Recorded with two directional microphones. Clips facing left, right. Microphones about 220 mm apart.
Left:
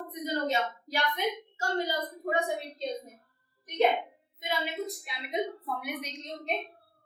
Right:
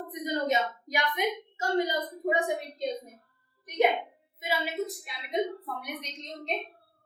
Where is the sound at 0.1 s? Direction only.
15° right (ahead or behind).